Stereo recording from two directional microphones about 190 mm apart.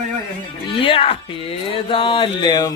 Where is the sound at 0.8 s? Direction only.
30° left (ahead or behind).